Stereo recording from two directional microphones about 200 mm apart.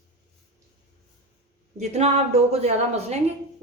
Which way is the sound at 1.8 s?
30° right (ahead or behind).